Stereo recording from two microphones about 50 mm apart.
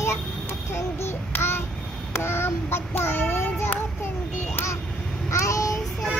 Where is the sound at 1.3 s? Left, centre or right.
Left.